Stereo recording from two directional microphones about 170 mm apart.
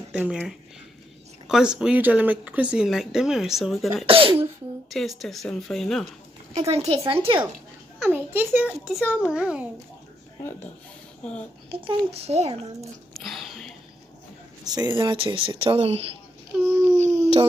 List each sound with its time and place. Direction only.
0.1 s speech: 10° right (ahead or behind)
4.0 s speech: 30° right (ahead or behind)
4.9 s speech: centre (ahead or behind)
6.5 s speech: 40° right (ahead or behind)
8.1 s a child's voice: 10° right (ahead or behind)
8.8 s a child's voice: centre (ahead or behind)
11.7 s speech: 35° right (ahead or behind)
13.1 s a sound: centre (ahead or behind)
14.6 s speech: 25° right (ahead or behind)
16.6 s a child's voice: 15° right (ahead or behind)
17.0 s dog: 40° right (ahead or behind)